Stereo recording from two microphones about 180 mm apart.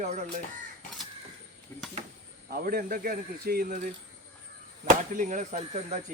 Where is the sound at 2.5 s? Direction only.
55° right (ahead or behind).